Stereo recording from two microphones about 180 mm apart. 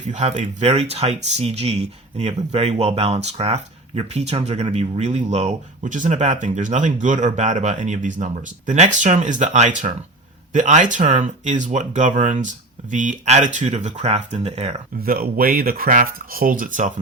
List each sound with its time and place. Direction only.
0.1 s speech: 40° right (ahead or behind)
15.0 s speech: 55° right (ahead or behind)